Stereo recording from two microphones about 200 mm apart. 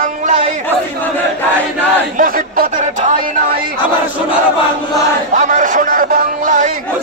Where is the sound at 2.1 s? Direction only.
45° right (ahead or behind).